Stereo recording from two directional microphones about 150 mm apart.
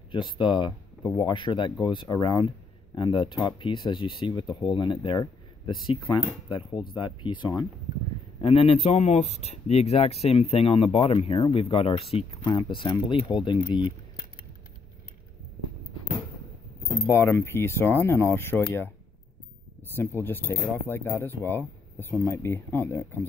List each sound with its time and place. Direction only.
0.1 s speech: 30° left (ahead or behind)
17.0 s speech: 20° left (ahead or behind)
20.0 s speech: 15° left (ahead or behind)